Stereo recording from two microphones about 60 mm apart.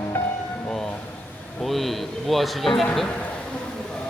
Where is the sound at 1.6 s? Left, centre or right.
Centre.